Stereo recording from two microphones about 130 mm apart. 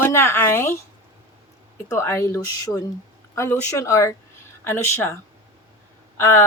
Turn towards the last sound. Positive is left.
turn(degrees=20)  # may be behind; listen again after turning